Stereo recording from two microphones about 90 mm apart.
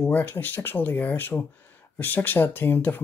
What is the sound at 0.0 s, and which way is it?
Speech, 20° left (ahead or behind).